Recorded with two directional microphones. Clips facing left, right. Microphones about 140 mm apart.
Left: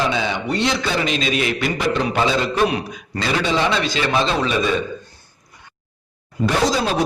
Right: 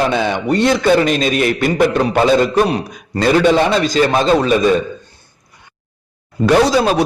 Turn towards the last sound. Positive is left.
turn(degrees=-65)  # may be behind; listen again after turning